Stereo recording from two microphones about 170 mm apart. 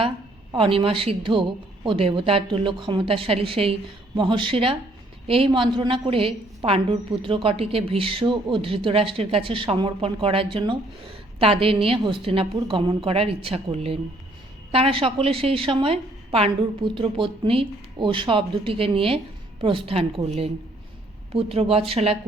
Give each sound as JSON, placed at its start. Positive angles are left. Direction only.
{"t": 0.5, "sound": "a woman's voice", "side_deg": -30}